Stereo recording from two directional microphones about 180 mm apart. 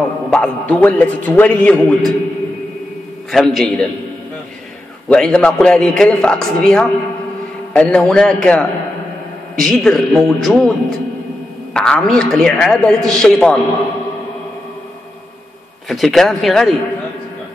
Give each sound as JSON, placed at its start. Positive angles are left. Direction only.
{"t": 0.3, "sound": "a man's voice", "side_deg": 5}
{"t": 3.3, "sound": "a man's voice", "side_deg": 0}
{"t": 5.1, "sound": "a man's voice", "side_deg": 5}
{"t": 15.9, "sound": "a man's voice", "side_deg": 0}